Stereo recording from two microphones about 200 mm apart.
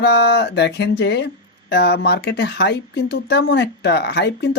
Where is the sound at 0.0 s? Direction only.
55° left (ahead or behind).